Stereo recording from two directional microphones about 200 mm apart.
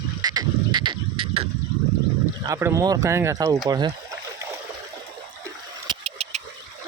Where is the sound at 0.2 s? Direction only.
20° right (ahead or behind).